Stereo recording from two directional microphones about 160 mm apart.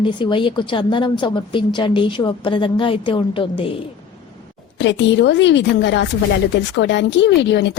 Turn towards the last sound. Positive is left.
turn(degrees=90)